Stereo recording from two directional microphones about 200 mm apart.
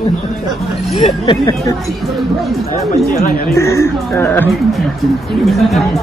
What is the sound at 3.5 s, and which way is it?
Speech, 15° left (ahead or behind).